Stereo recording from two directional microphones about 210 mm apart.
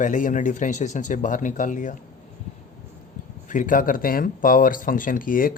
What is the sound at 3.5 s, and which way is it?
Speech, 40° left (ahead or behind).